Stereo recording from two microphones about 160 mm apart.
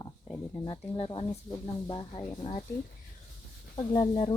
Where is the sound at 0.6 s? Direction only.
35° left (ahead or behind).